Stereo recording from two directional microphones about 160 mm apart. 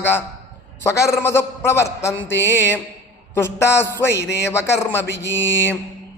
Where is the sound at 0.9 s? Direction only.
20° left (ahead or behind).